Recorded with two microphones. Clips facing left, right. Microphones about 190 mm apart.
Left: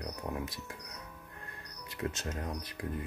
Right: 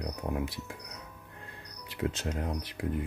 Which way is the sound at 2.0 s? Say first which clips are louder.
Right 4 dB; 10° right (ahead or behind).